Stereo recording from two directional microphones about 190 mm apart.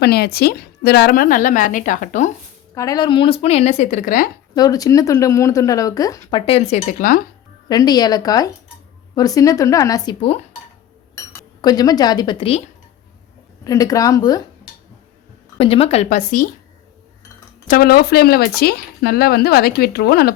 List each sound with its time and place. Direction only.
0.0 s a woman's voice: 55° left (ahead or behind); by 2.3 s 40° left (ahead or behind)
2.7 s speech: 20° left (ahead or behind); by 4.3 s 50° left (ahead or behind)
4.5 s speech: 20° left (ahead or behind); by 7.2 s 40° left (ahead or behind)
7.7 s speech: 20° left (ahead or behind)
10.2 s speech: 30° left (ahead or behind)
11.1 s speech: 20° left (ahead or behind)
13.7 s speech: 20° left (ahead or behind)
15.5 s speech: 30° left (ahead or behind)
17.7 s speech: 50° left (ahead or behind)